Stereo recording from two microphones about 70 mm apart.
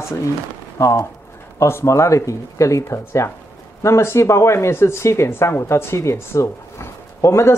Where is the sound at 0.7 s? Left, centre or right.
Left.